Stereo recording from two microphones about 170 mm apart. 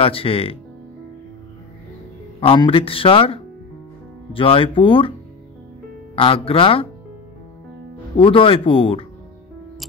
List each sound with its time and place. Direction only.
0.0 s speech: 35° left (ahead or behind)
2.4 s speech: 30° left (ahead or behind)
6.1 s speech: 30° left (ahead or behind)
8.2 s speech: 30° left (ahead or behind)